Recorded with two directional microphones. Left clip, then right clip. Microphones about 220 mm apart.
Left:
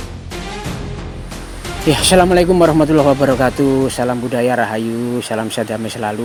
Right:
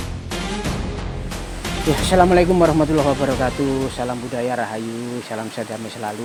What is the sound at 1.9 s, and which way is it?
Speech, 45° left (ahead or behind).